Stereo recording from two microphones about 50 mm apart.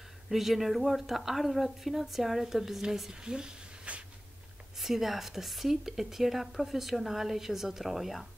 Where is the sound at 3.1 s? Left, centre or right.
Centre.